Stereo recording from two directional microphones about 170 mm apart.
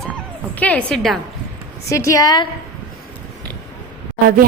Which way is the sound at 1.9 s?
20° left (ahead or behind).